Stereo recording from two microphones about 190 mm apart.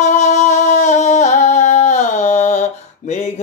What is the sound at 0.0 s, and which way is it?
Singing, 35° left (ahead or behind).